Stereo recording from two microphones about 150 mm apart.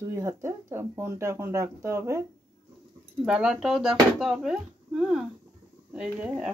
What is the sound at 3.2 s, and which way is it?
Speech, 5° right (ahead or behind).